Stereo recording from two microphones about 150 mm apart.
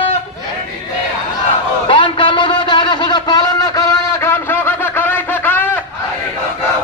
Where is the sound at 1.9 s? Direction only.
35° left (ahead or behind); by 5.7 s 10° left (ahead or behind).